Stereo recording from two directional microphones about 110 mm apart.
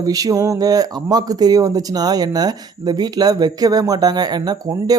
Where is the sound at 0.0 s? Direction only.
35° right (ahead or behind).